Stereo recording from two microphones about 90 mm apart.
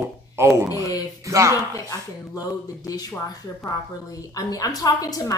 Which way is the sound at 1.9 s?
40° left (ahead or behind).